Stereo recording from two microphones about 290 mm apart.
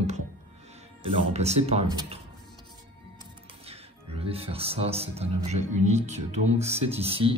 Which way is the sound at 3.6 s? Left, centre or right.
Centre.